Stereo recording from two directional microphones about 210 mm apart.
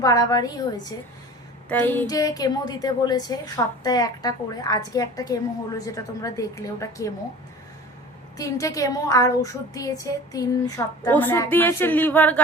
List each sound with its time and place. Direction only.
0.0 s a woman's voice: 15° left (ahead or behind)
8.4 s a woman's voice: 15° left (ahead or behind)